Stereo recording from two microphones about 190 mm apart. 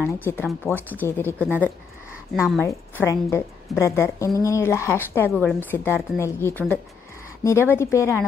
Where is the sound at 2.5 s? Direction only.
10° left (ahead or behind).